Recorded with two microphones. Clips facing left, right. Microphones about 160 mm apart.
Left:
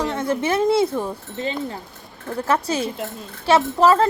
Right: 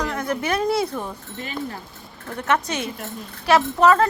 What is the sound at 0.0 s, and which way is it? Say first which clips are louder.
A woman's voice: left 3 dB; 25° left (ahead or behind).